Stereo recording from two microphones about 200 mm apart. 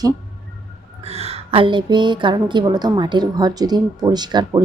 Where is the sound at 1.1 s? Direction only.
30° right (ahead or behind).